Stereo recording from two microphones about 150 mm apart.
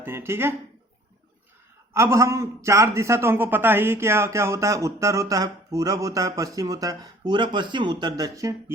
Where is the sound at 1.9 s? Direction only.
20° right (ahead or behind).